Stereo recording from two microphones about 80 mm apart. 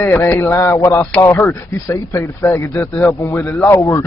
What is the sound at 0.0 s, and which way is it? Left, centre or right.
A man's voice, left.